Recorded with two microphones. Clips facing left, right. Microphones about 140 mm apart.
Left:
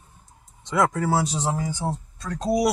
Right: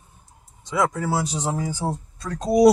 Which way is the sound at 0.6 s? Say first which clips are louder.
Left 1 dB; centre (ahead or behind).